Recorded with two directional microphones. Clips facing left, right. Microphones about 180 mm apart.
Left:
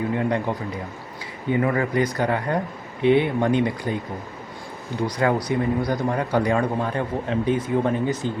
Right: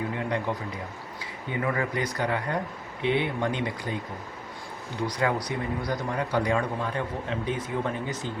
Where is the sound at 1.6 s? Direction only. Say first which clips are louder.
Left 4 dB; 40° left (ahead or behind).